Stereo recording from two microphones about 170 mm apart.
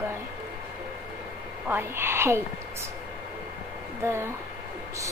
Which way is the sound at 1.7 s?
15° right (ahead or behind).